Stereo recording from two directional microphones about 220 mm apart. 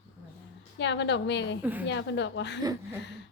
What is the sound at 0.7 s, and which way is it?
Speech, 55° left (ahead or behind).